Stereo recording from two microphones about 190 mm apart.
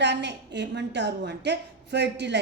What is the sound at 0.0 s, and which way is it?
A woman's voice, 65° right (ahead or behind).